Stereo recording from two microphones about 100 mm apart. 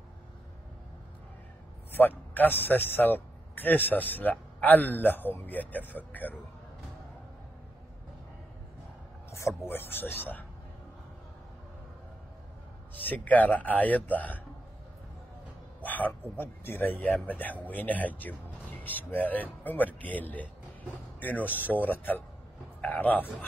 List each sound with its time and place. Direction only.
1.9 s a man's voice: 20° left (ahead or behind)
9.3 s a sound: 30° left (ahead or behind)
9.7 s a man's voice: 20° left (ahead or behind)
13.0 s speech: 15° left (ahead or behind)
15.8 s a man's voice: 15° left (ahead or behind)